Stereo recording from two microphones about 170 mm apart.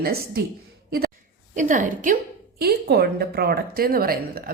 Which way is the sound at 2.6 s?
65° right (ahead or behind).